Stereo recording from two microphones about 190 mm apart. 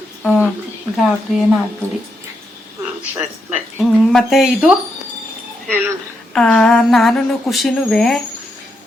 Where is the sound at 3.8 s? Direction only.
Centre (ahead or behind).